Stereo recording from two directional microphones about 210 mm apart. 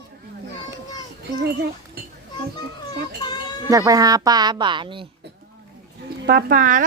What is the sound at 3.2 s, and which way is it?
Children playing, 20° left (ahead or behind).